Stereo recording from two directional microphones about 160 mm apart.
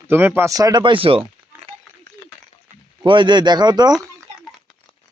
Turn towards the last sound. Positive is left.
turn(degrees=-25)  # may be behind; listen again after turning